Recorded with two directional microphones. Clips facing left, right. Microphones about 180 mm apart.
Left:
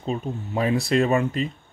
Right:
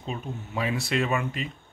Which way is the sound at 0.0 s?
40° left (ahead or behind).